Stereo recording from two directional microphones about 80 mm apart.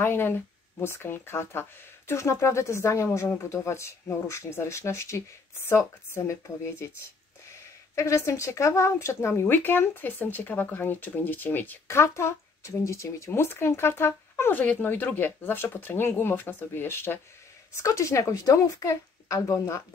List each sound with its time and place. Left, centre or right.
0.0 s speech: left
7.9 s speech: left
12.0 s speech: left
17.7 s speech: left